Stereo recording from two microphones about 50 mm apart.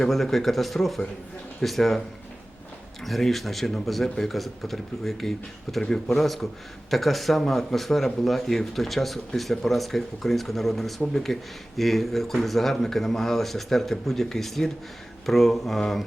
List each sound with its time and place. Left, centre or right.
0.0 s speech: centre
3.0 s speech: centre